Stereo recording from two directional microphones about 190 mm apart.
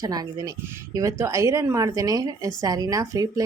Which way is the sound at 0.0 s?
20° right (ahead or behind).